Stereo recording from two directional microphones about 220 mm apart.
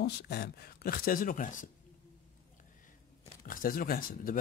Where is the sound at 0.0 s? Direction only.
45° left (ahead or behind).